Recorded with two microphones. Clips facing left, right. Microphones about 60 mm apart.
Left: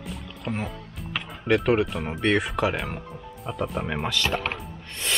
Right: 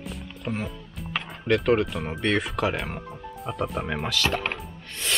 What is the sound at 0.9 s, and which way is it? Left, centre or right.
Speech, centre.